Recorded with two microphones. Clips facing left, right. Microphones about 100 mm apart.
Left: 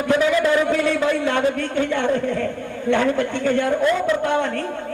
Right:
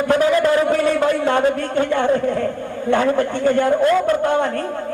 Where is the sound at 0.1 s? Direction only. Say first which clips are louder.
Right 1 dB; 40° right (ahead or behind).